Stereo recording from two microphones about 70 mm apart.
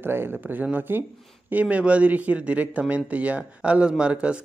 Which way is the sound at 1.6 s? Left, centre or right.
Centre.